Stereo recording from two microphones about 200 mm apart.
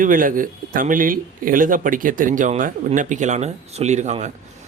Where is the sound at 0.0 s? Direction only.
45° right (ahead or behind).